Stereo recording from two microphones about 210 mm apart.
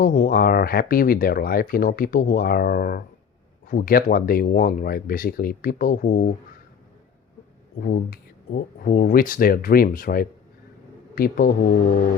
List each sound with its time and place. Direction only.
0.0 s speech: 45° left (ahead or behind)
7.8 s speech: 45° left (ahead or behind)